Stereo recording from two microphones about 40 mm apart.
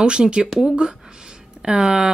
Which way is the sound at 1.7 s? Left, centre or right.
Centre.